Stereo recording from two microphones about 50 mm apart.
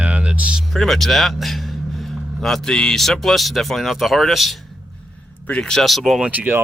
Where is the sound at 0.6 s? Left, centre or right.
Centre.